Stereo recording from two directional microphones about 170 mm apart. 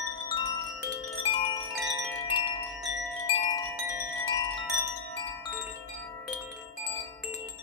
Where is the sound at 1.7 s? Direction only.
5° right (ahead or behind).